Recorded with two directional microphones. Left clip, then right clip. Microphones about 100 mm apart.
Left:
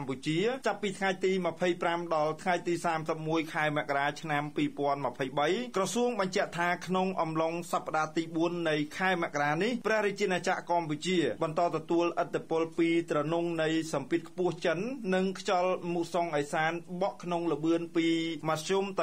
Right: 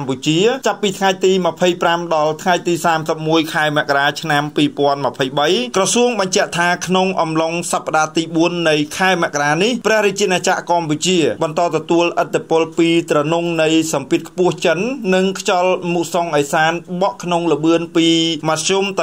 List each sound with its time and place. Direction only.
0.1 s speech: 15° right (ahead or behind)